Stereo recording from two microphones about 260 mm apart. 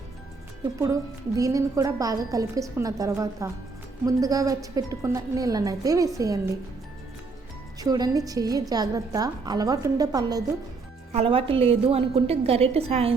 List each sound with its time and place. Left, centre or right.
0.6 s a woman's voice: centre
7.8 s a woman's voice: centre